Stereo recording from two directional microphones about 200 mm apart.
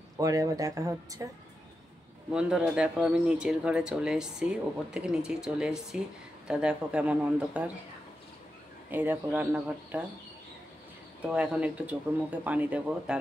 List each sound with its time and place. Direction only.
0.2 s speech: 15° right (ahead or behind)
2.3 s speech: 5° right (ahead or behind)
8.9 s speech: 10° right (ahead or behind)
11.3 s speech: 5° right (ahead or behind)